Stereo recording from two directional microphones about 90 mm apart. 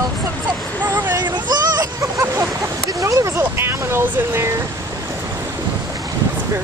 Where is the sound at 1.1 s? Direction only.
50° right (ahead or behind).